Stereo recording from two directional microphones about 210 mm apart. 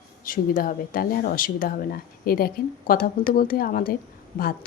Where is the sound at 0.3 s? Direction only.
40° left (ahead or behind).